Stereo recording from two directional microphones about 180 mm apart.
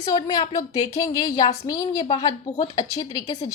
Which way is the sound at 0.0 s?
20° left (ahead or behind).